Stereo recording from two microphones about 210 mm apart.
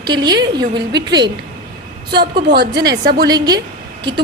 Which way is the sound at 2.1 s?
50° right (ahead or behind).